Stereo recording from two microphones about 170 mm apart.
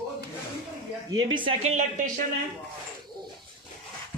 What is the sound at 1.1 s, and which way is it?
Speech, 30° right (ahead or behind).